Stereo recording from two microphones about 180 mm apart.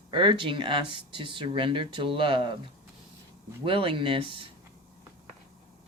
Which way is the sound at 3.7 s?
30° right (ahead or behind).